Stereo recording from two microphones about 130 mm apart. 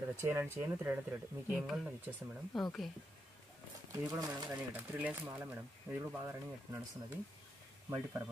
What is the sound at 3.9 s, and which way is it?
Speech, 25° right (ahead or behind).